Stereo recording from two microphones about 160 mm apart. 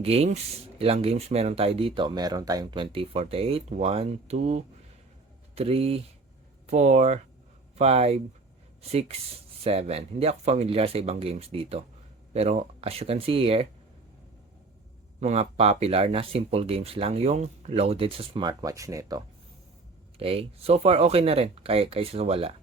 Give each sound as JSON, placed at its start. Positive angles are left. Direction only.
{"t": 0.0, "sound": "speech", "side_deg": -40}
{"t": 15.2, "sound": "speech", "side_deg": -45}
{"t": 20.1, "sound": "speech", "side_deg": -40}